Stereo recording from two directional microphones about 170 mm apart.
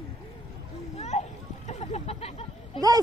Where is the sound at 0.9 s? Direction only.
40° left (ahead or behind).